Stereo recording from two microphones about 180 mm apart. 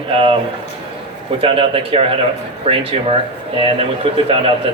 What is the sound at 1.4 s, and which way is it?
A man's voice, 30° right (ahead or behind).